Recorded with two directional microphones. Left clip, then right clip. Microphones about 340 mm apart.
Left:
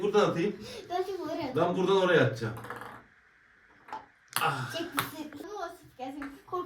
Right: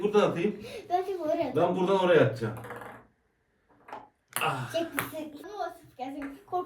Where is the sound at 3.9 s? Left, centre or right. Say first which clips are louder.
Left 2 dB; centre.